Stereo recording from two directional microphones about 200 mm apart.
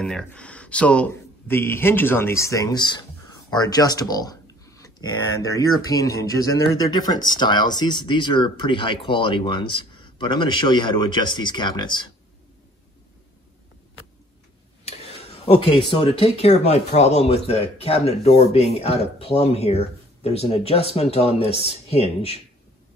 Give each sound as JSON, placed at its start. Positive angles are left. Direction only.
{"t": 0.0, "sound": "a man's voice", "side_deg": 5}
{"t": 3.4, "sound": "a sound", "side_deg": 20}
{"t": 5.4, "sound": "a man's voice", "side_deg": 15}
{"t": 15.4, "sound": "speech", "side_deg": 30}